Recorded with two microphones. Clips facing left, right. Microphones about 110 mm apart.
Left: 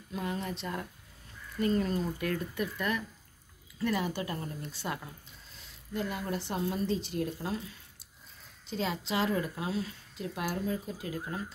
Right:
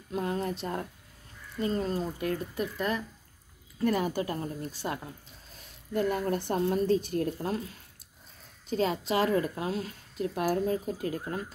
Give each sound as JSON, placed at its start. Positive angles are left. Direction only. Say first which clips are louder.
{"t": 0.1, "sound": "speech", "louder": "right 4 dB", "side_deg": -40}